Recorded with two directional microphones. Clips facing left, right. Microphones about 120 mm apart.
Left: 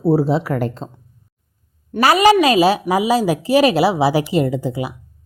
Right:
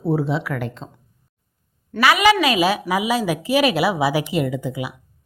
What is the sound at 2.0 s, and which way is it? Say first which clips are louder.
A woman's voice: left 4 dB; 40° left (ahead or behind).